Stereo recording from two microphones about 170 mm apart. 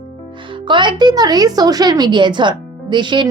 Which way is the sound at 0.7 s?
25° right (ahead or behind).